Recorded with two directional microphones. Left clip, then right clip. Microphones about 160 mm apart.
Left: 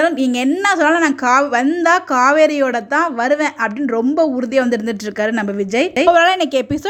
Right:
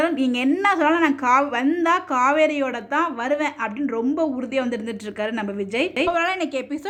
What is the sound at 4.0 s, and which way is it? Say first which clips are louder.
Speech: left 8 dB; 50° left (ahead or behind).